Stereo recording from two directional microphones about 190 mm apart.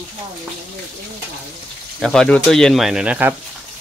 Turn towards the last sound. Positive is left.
turn(degrees=-5)  # may be behind; listen again after turning